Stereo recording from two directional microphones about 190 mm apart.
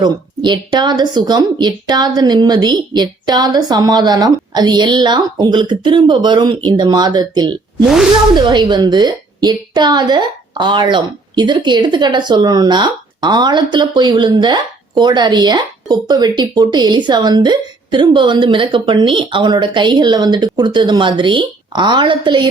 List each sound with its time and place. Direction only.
0.0 s a woman's voice: 25° right (ahead or behind)